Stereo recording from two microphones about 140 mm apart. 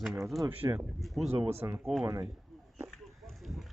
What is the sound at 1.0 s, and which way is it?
Speech, centre (ahead or behind).